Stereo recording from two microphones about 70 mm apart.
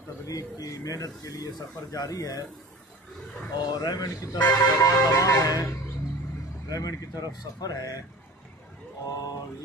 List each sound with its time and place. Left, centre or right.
0.3 s speech: left
3.5 s speech: left
4.5 s vehicle: left
6.7 s speech: left